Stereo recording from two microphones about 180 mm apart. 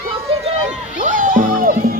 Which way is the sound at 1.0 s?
45° right (ahead or behind).